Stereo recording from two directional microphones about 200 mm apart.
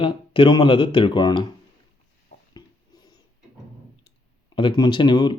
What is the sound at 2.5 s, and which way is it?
Rodents, 20° left (ahead or behind).